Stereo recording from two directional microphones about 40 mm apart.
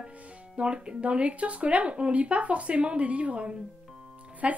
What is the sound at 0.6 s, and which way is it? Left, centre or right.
Speech, right.